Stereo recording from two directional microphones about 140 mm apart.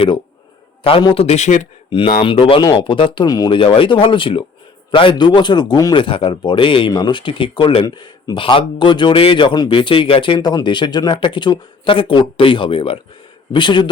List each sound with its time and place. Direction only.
0.9 s speech: 40° left (ahead or behind); by 1.6 s 55° left (ahead or behind)
1.9 s a man's voice: 40° left (ahead or behind)
3.6 s a man's voice: 40° left (ahead or behind)